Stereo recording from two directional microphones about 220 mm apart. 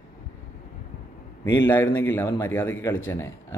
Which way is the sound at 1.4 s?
10° left (ahead or behind).